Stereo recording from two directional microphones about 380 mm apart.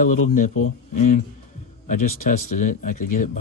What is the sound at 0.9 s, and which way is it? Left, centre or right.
Speech, centre.